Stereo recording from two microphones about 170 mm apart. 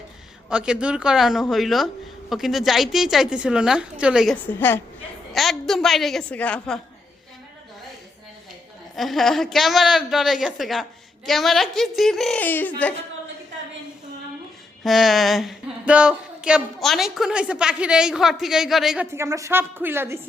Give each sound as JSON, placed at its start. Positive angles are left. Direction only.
{"t": 0.5, "sound": "speech", "side_deg": -5}
{"t": 4.4, "sound": "a woman's voice", "side_deg": 10}
{"t": 5.3, "sound": "speech", "side_deg": 0}
{"t": 9.0, "sound": "speech", "side_deg": 0}
{"t": 14.8, "sound": "speech", "side_deg": 0}
{"t": 19.1, "sound": "speech", "side_deg": -15}